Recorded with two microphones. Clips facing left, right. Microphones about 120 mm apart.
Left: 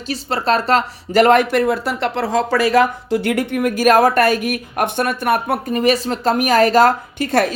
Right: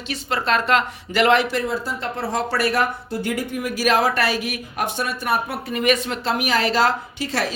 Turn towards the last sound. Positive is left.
turn(degrees=50)  # may be behind; listen again after turning